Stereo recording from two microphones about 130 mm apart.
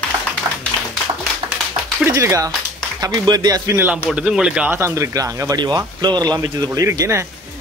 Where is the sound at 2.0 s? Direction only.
20° right (ahead or behind).